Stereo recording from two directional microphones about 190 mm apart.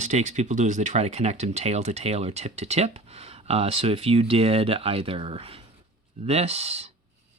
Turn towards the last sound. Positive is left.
turn(degrees=-35)  # may be behind; listen again after turning